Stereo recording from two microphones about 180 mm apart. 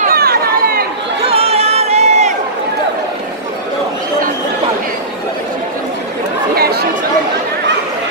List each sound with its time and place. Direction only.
0.1 s chatter: 55° right (ahead or behind)
1.3 s a sound: 35° right (ahead or behind)
6.5 s chatter: 60° right (ahead or behind)